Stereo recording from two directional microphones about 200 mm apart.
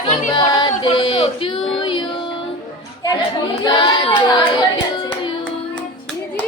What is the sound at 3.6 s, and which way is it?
Music, 25° left (ahead or behind).